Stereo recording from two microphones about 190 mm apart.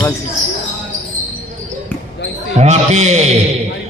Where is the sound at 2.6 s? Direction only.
35° right (ahead or behind).